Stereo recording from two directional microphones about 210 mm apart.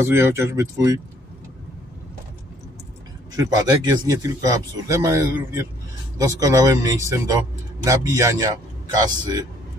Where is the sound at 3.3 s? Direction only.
20° right (ahead or behind).